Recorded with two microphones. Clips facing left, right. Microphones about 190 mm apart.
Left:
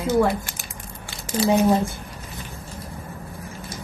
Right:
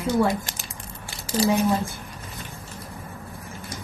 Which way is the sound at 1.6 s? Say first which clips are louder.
Left 4 dB; 35° left (ahead or behind).